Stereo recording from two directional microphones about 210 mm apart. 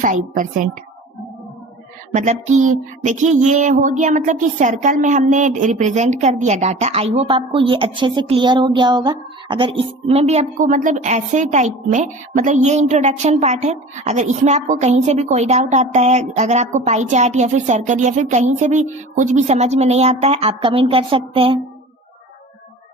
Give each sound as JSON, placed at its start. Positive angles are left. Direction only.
{"t": 0.0, "sound": "music", "side_deg": -40}
{"t": 2.1, "sound": "music", "side_deg": -35}